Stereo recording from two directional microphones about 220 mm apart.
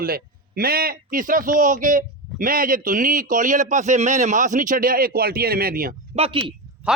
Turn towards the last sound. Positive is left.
turn(degrees=-5)  # may be behind; listen again after turning